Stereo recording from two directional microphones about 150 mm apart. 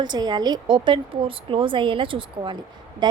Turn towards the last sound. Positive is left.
turn(degrees=-30)  # may be behind; listen again after turning